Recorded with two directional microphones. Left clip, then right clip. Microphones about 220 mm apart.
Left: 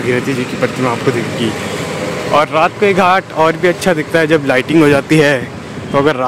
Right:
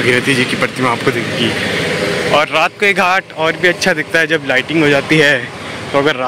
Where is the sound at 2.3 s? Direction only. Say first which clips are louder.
Left 3 dB; 5° left (ahead or behind).